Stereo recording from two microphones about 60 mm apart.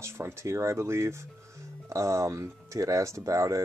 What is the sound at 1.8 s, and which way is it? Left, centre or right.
Speech, right.